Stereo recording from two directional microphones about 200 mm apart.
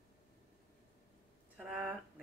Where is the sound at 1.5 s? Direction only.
5° right (ahead or behind).